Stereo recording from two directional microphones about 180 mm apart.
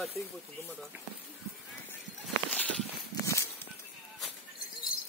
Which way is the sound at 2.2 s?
5° left (ahead or behind).